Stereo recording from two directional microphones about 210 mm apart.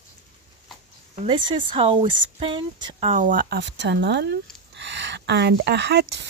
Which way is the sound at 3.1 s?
40° right (ahead or behind).